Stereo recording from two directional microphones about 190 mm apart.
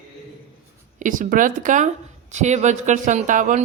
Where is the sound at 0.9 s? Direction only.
45° right (ahead or behind).